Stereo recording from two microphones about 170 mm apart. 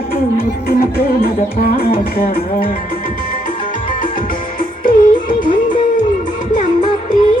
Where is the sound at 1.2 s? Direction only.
60° left (ahead or behind).